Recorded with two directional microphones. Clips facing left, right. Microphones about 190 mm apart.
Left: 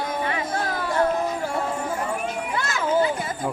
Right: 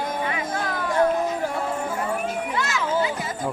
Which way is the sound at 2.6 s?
55° left (ahead or behind).